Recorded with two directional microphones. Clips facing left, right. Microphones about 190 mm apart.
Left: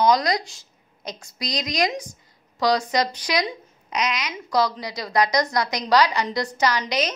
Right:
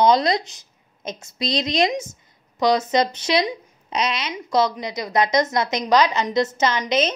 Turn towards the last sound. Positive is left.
turn(degrees=-25)  # may be behind; listen again after turning